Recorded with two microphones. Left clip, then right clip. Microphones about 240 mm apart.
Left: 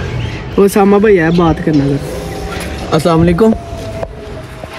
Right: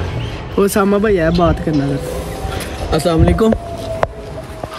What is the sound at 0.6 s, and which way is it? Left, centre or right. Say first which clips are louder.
Speech: left 5 dB; centre.